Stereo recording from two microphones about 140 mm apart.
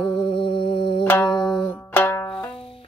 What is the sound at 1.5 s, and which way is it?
Music, 40° left (ahead or behind).